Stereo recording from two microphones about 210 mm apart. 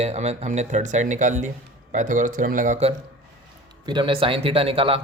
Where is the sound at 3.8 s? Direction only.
20° right (ahead or behind).